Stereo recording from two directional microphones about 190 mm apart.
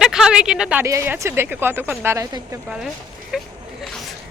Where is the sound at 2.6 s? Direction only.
5° right (ahead or behind).